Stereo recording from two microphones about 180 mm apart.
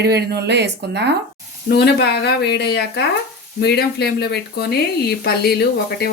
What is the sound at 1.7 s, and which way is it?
A woman's voice, 65° left (ahead or behind).